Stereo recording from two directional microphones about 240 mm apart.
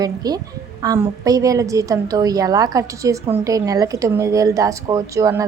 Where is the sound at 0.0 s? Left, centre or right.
Centre.